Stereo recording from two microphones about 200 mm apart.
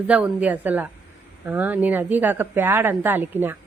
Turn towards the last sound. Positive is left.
turn(degrees=-10)  # may be behind; listen again after turning